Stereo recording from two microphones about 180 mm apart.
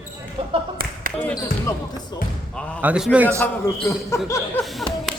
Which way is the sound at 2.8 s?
5° right (ahead or behind).